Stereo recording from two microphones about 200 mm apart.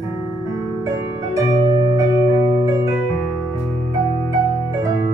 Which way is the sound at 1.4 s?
20° right (ahead or behind).